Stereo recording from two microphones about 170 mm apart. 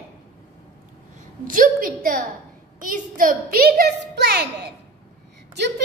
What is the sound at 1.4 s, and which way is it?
A woman's voice, 55° right (ahead or behind).